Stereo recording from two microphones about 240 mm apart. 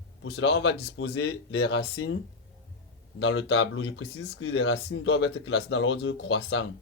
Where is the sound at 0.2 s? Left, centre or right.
Left.